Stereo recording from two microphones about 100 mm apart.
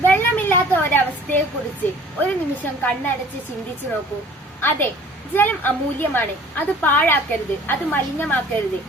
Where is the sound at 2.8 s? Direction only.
20° left (ahead or behind).